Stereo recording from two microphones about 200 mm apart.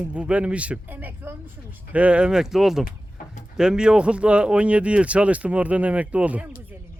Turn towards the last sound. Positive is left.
turn(degrees=-5)  # may be behind; listen again after turning